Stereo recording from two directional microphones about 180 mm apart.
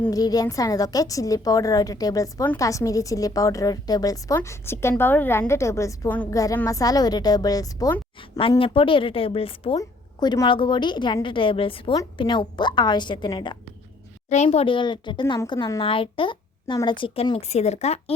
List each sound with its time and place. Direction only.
0.0 s a woman's voice: 20° left (ahead or behind)
8.4 s a woman's voice: 30° left (ahead or behind)
9.7 s a woman's voice: 20° left (ahead or behind)
14.3 s a woman's voice: 40° left (ahead or behind)